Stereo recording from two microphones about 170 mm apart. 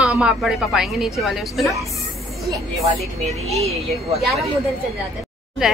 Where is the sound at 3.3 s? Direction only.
40° right (ahead or behind).